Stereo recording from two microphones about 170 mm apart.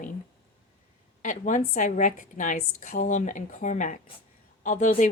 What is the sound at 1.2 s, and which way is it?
Speech, 50° left (ahead or behind).